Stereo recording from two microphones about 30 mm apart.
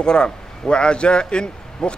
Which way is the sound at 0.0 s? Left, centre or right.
Left.